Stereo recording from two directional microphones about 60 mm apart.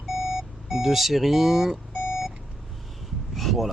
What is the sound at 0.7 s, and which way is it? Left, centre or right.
Speech, centre.